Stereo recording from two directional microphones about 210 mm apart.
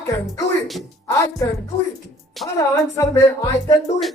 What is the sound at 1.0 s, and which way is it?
A woman's voice, 15° left (ahead or behind).